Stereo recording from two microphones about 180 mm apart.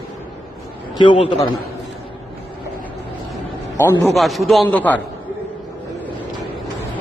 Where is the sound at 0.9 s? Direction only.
25° left (ahead or behind).